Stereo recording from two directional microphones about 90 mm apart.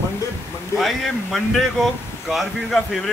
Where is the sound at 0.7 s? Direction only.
Centre (ahead or behind).